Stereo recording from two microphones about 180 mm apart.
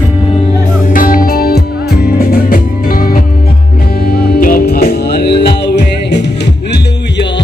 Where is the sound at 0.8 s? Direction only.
50° left (ahead or behind).